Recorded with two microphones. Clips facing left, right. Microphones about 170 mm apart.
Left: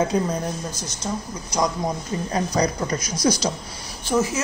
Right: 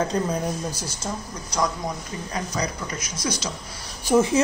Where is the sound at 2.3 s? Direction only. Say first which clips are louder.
Left 6 dB; 35° left (ahead or behind).